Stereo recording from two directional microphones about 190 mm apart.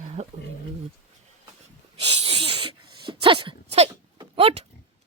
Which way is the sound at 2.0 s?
30° right (ahead or behind).